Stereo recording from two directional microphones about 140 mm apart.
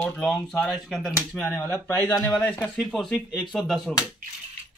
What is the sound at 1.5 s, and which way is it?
Speech, 15° left (ahead or behind).